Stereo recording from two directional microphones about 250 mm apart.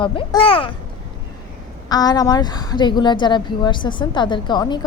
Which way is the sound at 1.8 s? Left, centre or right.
Centre.